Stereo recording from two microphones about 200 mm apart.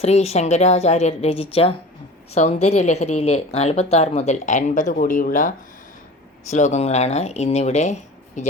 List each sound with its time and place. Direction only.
0.0 s speech: 30° left (ahead or behind)